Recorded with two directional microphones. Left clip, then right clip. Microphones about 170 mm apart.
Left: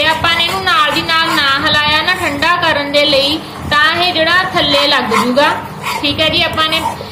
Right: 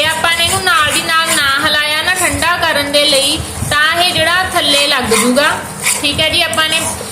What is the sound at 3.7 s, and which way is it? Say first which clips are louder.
A woman's voice: even; 40° right (ahead or behind).